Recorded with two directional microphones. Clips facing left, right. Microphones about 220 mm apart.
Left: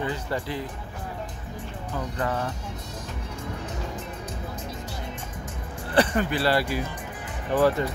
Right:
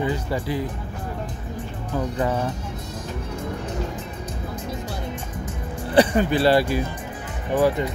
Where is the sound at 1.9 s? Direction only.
15° right (ahead or behind).